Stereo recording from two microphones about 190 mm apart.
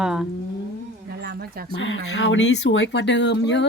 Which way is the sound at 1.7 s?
80° left.